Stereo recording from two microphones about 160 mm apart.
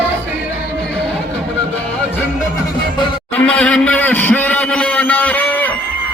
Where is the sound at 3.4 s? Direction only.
5° left (ahead or behind).